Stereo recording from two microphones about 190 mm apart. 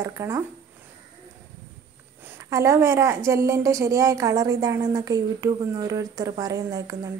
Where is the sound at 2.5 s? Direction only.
15° right (ahead or behind).